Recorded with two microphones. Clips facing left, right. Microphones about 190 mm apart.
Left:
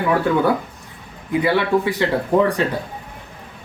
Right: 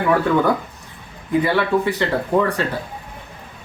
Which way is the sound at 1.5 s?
15° left (ahead or behind).